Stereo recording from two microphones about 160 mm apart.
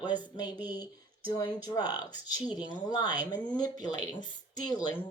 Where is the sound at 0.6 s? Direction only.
25° left (ahead or behind).